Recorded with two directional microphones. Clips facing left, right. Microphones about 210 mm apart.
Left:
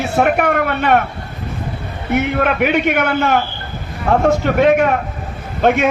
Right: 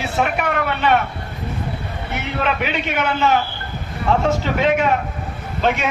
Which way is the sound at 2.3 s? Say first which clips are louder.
Left 3 dB; 55° left (ahead or behind).